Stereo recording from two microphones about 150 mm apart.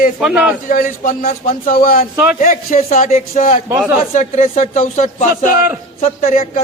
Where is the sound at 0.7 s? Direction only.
60° left (ahead or behind).